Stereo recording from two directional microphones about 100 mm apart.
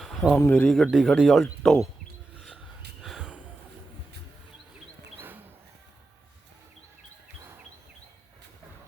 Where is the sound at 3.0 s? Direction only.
5° right (ahead or behind).